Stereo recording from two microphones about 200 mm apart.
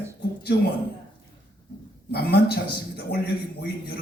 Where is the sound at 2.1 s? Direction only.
50° left (ahead or behind).